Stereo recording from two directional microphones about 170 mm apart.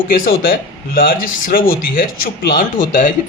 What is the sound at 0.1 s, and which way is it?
A man's voice, 60° left (ahead or behind).